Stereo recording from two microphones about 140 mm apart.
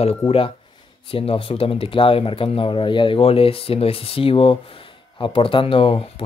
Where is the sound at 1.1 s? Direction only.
40° left (ahead or behind).